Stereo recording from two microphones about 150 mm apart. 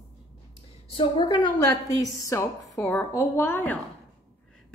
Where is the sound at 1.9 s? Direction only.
20° left (ahead or behind).